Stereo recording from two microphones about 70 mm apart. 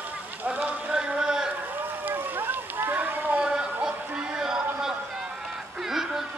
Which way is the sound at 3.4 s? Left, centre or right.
Centre.